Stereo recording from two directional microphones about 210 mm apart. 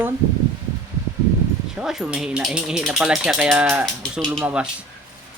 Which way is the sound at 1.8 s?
5° right (ahead or behind).